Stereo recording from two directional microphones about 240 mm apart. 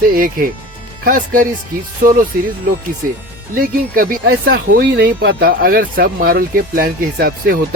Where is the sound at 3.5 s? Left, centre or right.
Right.